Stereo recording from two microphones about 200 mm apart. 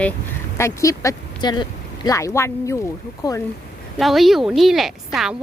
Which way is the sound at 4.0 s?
Centre (ahead or behind).